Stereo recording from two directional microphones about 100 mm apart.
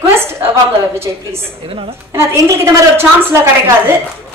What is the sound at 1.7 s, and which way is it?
Speech, 70° right (ahead or behind).